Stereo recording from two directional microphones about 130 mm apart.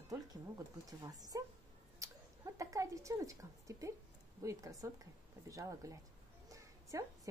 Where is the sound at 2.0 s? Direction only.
25° right (ahead or behind).